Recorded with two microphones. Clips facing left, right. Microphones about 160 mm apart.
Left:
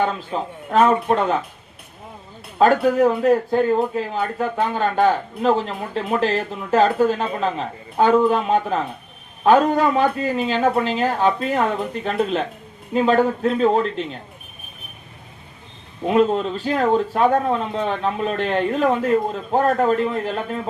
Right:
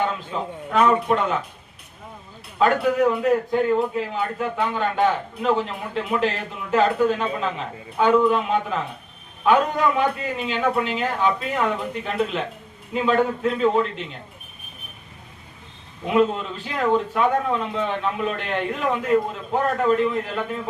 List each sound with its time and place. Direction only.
0.7 s a man's voice: 40° left (ahead or behind)
2.6 s a man's voice: 40° left (ahead or behind)
16.0 s a man's voice: 40° left (ahead or behind)